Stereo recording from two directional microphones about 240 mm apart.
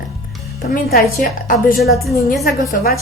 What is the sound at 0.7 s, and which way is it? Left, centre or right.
A woman's voice, left.